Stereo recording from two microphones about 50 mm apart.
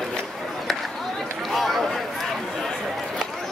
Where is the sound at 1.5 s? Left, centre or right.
Centre.